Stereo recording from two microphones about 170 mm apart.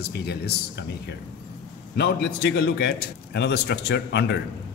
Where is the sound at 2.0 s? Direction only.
80° left.